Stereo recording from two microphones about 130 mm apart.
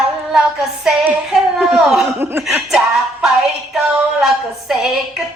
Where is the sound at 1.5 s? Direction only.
5° right (ahead or behind).